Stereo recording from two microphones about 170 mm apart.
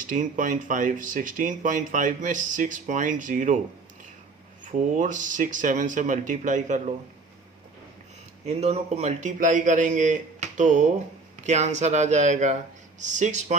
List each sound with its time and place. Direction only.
0.0 s speech: 50° right (ahead or behind)
4.6 s speech: 50° right (ahead or behind)
8.4 s speech: 40° right (ahead or behind)